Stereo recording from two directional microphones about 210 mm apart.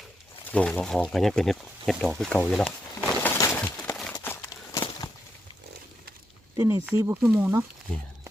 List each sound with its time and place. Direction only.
0.5 s speech: 5° left (ahead or behind)
3.2 s a sound: 15° left (ahead or behind)
6.6 s speech: 15° right (ahead or behind)